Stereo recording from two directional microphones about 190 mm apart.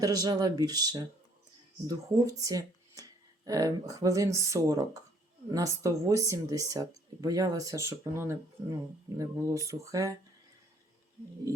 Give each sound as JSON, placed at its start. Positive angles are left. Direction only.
{"t": 0.0, "sound": "speech", "side_deg": -20}